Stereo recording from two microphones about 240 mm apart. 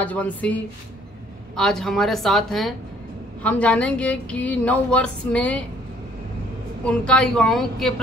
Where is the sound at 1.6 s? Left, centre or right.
Centre.